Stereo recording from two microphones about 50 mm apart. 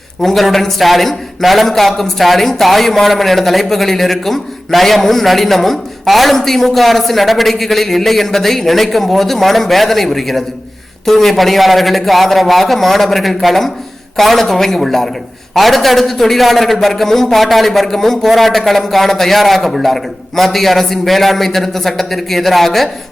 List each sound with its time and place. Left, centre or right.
0.2 s a man's voice: centre